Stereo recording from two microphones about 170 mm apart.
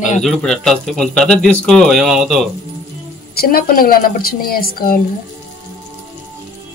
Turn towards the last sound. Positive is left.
turn(degrees=60)  # may be behind; listen again after turning